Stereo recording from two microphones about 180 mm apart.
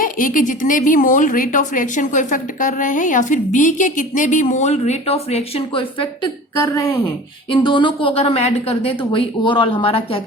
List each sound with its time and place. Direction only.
0.0 s speech: 50° left (ahead or behind); by 6.1 s 30° left (ahead or behind)
7.5 s a woman's voice: 25° left (ahead or behind)